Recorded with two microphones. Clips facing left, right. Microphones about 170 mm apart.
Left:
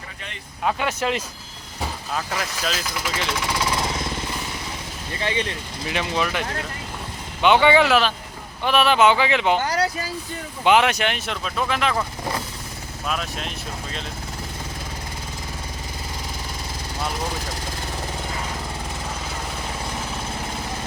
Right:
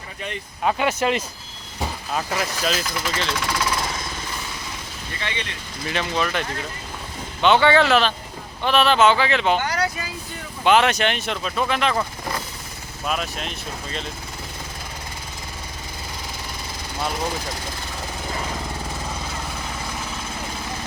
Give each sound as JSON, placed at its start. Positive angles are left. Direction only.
{"t": 0.6, "sound": "speech", "side_deg": -5}
{"t": 2.4, "sound": "speech", "side_deg": 0}
{"t": 3.1, "sound": "speech", "side_deg": 15}
{"t": 5.2, "sound": "speech", "side_deg": 35}
{"t": 5.9, "sound": "speech", "side_deg": 15}
{"t": 7.4, "sound": "speech", "side_deg": 15}
{"t": 9.6, "sound": "speech", "side_deg": 35}
{"t": 10.6, "sound": "speech", "side_deg": 15}
{"t": 13.1, "sound": "speech", "side_deg": -5}